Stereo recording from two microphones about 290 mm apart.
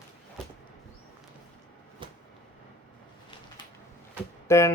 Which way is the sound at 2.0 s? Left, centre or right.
Centre.